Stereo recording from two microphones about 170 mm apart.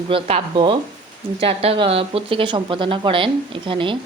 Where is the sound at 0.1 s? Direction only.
35° right (ahead or behind).